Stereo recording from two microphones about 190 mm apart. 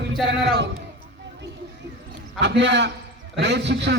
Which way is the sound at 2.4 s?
65° right (ahead or behind).